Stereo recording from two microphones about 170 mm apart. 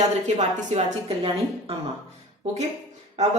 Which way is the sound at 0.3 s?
40° right (ahead or behind).